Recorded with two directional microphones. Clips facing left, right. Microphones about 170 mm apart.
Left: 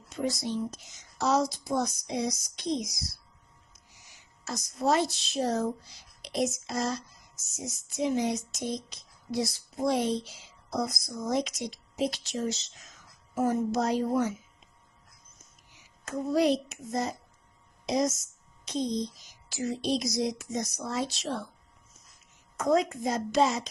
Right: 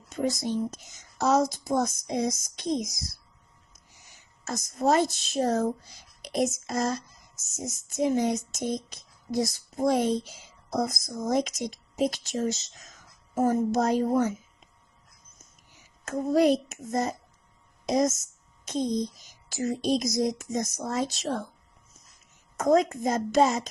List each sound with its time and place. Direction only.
0.2 s speech: 50° right (ahead or behind)
4.4 s speech: 50° right (ahead or behind)
6.2 s a sound: 50° right (ahead or behind)
7.5 s speech: 45° right (ahead or behind)
15.7 s a child's voice: 50° right (ahead or behind)
22.5 s speech: 45° right (ahead or behind)